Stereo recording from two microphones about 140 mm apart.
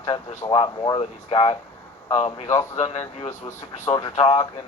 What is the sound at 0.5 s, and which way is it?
Speech, 35° left (ahead or behind).